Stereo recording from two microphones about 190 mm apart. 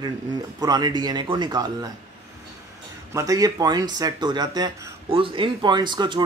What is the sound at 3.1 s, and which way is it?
Speech, 20° right (ahead or behind).